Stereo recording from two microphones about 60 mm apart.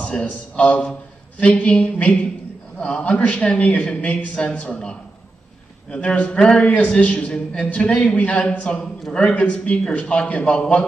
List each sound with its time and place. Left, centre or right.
0.3 s a man's voice: left